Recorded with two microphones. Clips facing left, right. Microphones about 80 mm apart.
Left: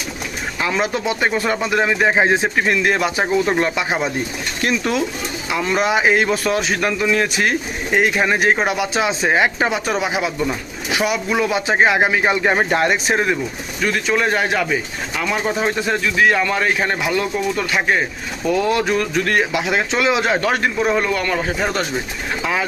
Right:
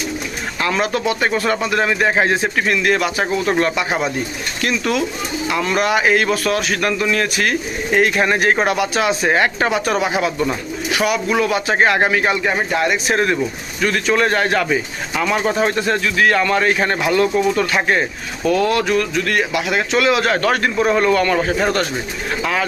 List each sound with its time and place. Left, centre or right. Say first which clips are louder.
0.6 s speech: right 2 dB; centre; by 13.1 s left
13.8 s speech: right 2 dB; centre
18.4 s speech: right 1 dB; centre